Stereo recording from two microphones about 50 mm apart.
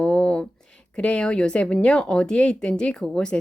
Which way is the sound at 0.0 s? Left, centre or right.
Left.